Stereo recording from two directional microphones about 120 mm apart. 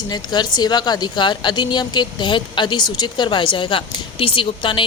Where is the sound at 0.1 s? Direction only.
35° left (ahead or behind).